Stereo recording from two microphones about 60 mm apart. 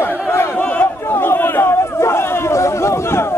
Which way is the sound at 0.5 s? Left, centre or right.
Left.